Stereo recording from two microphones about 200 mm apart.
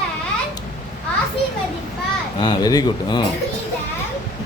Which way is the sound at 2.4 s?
20° left (ahead or behind).